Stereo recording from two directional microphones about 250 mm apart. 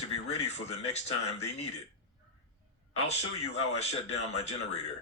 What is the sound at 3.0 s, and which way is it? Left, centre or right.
Speech, left.